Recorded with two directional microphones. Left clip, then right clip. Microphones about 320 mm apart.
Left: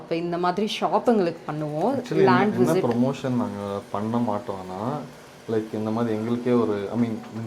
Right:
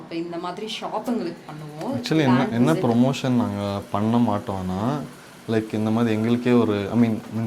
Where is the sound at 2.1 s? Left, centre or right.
Right.